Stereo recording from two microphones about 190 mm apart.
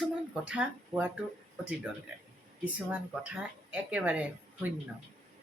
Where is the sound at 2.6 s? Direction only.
5° right (ahead or behind).